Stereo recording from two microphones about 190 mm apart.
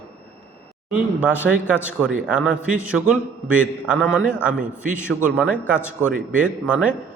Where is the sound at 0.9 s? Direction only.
5° right (ahead or behind).